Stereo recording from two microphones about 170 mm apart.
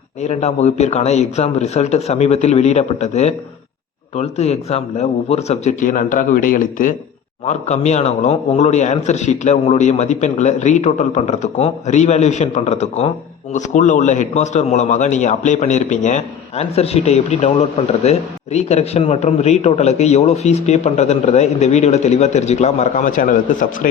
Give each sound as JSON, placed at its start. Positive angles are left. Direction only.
{"t": 0.2, "sound": "a man's voice", "side_deg": 40}
{"t": 7.4, "sound": "a man's voice", "side_deg": 40}